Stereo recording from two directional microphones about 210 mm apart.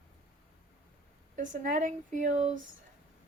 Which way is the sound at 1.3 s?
35° right (ahead or behind).